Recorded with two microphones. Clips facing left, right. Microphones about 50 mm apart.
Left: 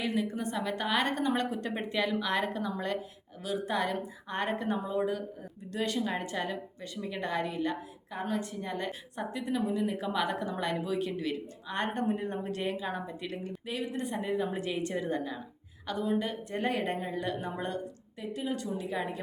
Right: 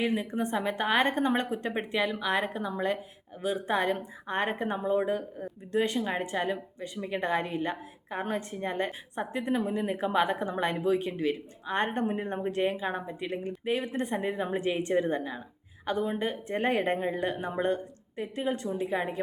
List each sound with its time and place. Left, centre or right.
0.0 s a woman's voice: right